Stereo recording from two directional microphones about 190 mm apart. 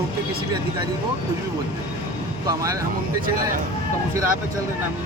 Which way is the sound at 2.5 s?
20° right (ahead or behind).